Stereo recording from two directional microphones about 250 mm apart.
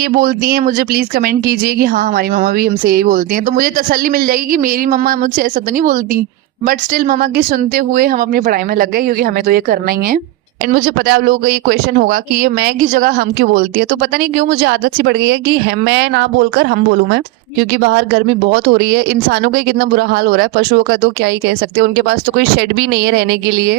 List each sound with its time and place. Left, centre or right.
0.2 s speech: right